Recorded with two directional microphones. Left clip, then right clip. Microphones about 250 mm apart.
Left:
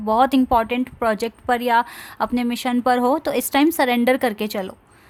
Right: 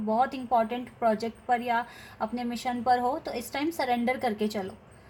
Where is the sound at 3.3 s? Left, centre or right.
Left.